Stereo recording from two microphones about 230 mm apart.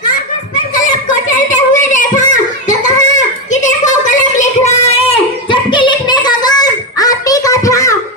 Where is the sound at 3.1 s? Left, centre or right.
Left.